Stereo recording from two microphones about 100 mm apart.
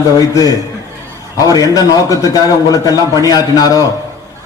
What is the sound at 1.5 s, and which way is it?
A man's voice, 40° left (ahead or behind).